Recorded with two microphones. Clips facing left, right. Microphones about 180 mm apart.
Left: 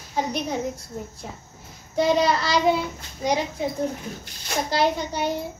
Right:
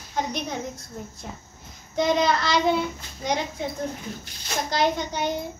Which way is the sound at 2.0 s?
5° left (ahead or behind).